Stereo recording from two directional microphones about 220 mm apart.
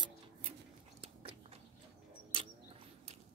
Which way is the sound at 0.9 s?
25° right (ahead or behind).